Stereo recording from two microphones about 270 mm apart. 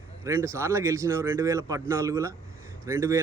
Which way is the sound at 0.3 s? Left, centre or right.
Centre.